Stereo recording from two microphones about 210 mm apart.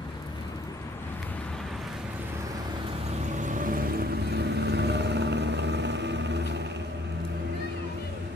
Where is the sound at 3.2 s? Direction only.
35° right (ahead or behind); by 6.8 s 55° right (ahead or behind).